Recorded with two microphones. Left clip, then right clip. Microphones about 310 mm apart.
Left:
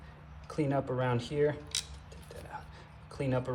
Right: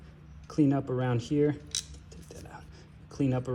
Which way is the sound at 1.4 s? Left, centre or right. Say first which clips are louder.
Right 2 dB; centre.